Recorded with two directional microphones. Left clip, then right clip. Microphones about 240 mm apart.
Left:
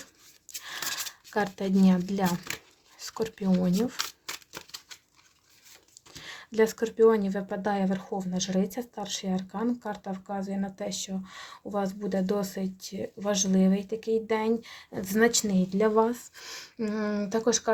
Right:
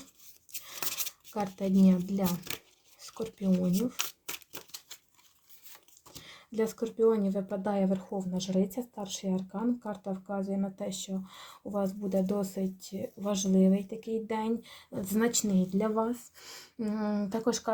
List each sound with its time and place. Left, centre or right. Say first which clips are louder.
1.3 s speech: left 4 dB; left
3.0 s a sound: left 6 dB; left
6.2 s speech: left 7 dB; left